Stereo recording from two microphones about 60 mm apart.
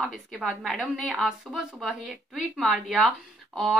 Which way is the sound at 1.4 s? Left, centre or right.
Centre.